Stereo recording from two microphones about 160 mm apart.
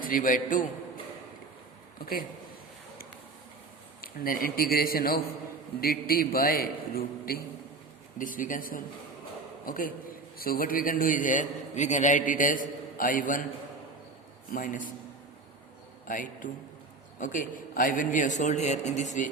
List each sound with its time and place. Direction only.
0.0 s a man's voice: 60° left (ahead or behind)
4.0 s a man's voice: 65° left (ahead or behind)
8.2 s a man's voice: 55° left (ahead or behind)
14.5 s a man's voice: 55° left (ahead or behind)
16.0 s a man's voice: 55° left (ahead or behind)